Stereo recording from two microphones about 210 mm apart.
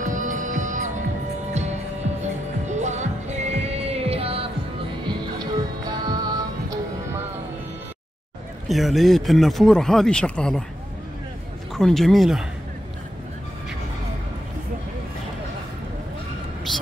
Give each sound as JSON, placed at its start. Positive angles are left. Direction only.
{"t": 0.0, "sound": "music", "side_deg": -40}
{"t": 2.7, "sound": "music", "side_deg": -35}
{"t": 8.6, "sound": "speech", "side_deg": 0}
{"t": 11.7, "sound": "speech", "side_deg": 0}